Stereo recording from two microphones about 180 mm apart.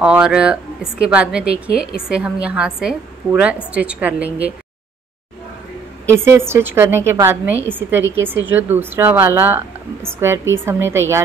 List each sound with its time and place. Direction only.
0.0 s a woman's voice: 5° right (ahead or behind)
6.1 s a woman's voice: 15° right (ahead or behind)